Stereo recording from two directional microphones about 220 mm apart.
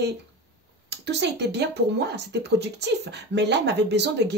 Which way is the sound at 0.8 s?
50° right (ahead or behind).